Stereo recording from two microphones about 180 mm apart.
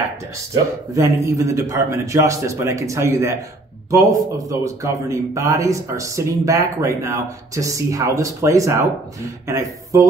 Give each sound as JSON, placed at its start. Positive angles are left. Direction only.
{"t": 0.9, "sound": "a man's voice", "side_deg": -20}